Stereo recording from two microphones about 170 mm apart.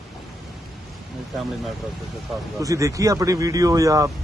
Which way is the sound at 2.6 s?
20° right (ahead or behind).